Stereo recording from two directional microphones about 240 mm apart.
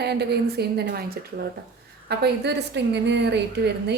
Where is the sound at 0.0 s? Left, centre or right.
Right.